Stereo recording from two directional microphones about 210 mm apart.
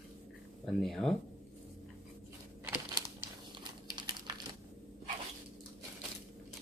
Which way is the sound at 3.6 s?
20° right (ahead or behind).